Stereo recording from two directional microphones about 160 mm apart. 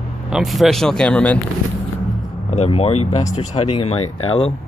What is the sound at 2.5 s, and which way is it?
Speech, 40° left (ahead or behind).